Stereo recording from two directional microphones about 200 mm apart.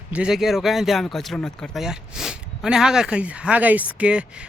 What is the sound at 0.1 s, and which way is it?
Speech, 5° right (ahead or behind).